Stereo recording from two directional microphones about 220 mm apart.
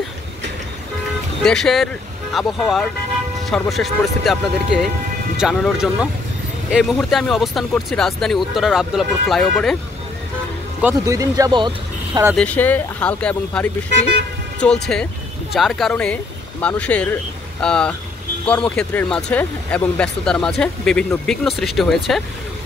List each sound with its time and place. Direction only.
1.4 s speech: centre (ahead or behind)
5.4 s speech: centre (ahead or behind)
10.8 s speech: 10° right (ahead or behind)
12.4 s speech: 5° left (ahead or behind)